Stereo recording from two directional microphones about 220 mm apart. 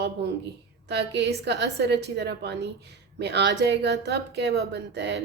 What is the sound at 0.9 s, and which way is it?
A woman's voice, 50° right (ahead or behind).